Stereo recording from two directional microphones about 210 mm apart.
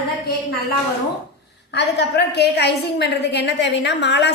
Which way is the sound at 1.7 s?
55° left (ahead or behind).